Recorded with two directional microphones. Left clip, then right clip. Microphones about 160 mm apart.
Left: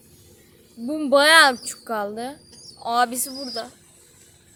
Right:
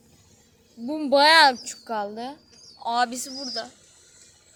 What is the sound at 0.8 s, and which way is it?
Speech, centre (ahead or behind).